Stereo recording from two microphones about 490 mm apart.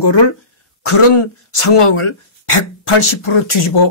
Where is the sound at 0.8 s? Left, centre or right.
Left.